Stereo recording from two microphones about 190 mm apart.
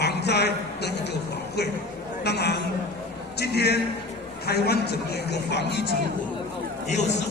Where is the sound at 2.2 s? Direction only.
60° left (ahead or behind).